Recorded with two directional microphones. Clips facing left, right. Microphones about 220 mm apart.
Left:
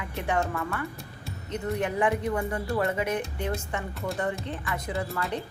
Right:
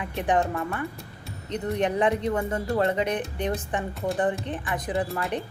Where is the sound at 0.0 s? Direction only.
20° right (ahead or behind).